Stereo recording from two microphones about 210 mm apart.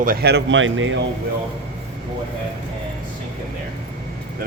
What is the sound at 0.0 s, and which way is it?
Speech, 45° right (ahead or behind).